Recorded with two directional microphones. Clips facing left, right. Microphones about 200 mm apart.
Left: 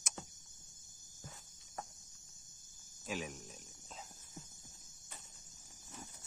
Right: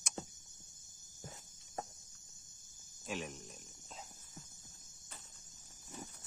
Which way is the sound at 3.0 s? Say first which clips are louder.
Even; centre (ahead or behind).